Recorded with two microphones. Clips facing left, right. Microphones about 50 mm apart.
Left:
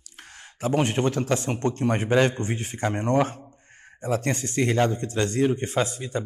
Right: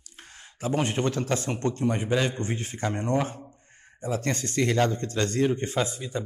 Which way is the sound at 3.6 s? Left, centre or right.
Left.